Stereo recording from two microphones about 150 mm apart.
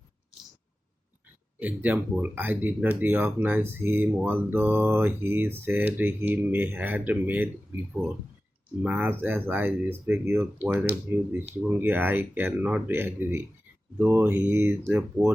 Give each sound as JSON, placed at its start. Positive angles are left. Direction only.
{"t": 1.5, "sound": "speech", "side_deg": -10}
{"t": 8.8, "sound": "speech", "side_deg": -10}